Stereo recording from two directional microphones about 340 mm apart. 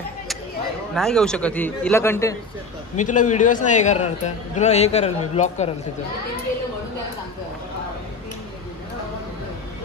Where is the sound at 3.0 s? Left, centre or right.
Left.